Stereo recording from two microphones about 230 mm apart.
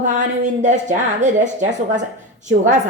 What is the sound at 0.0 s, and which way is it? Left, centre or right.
A woman's voice, right.